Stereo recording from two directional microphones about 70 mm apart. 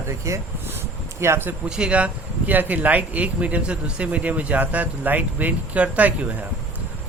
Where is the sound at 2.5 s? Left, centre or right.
Right.